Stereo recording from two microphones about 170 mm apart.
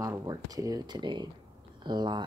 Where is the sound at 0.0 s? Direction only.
20° right (ahead or behind).